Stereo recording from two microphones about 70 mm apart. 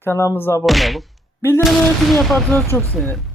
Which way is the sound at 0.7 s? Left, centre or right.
Centre.